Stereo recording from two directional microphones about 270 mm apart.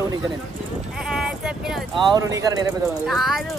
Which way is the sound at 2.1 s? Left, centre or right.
Centre.